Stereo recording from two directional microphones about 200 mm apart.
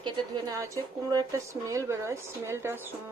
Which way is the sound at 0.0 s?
20° right (ahead or behind).